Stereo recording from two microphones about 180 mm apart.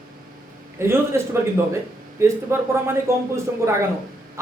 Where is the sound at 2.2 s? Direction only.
15° right (ahead or behind).